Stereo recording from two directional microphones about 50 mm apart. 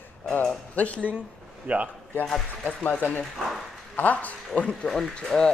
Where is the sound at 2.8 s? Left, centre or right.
Left.